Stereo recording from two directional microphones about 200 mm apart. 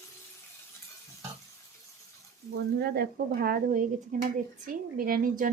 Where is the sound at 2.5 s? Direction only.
50° right (ahead or behind).